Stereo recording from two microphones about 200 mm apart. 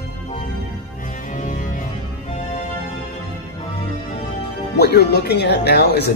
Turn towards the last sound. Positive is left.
turn(degrees=55)  # may be behind; listen again after turning